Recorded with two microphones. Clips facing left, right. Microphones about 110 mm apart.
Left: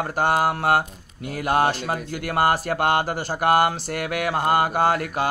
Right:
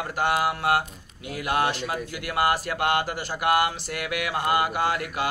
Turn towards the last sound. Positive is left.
turn(degrees=40)  # may be behind; listen again after turning